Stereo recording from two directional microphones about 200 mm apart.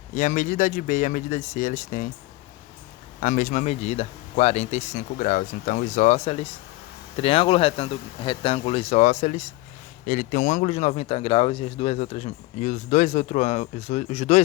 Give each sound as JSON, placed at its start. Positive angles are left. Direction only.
{"t": 0.1, "sound": "speech", "side_deg": 40}
{"t": 3.2, "sound": "speech", "side_deg": 40}